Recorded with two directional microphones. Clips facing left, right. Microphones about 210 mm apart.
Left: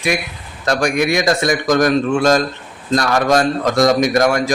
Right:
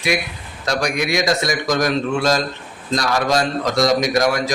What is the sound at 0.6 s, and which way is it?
A man's voice, 55° left (ahead or behind).